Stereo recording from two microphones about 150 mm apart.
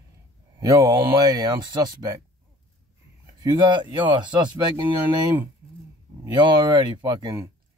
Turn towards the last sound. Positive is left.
turn(degrees=-25)  # may be behind; listen again after turning